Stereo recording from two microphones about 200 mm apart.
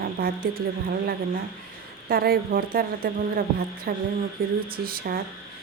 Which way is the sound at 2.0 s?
50° right (ahead or behind).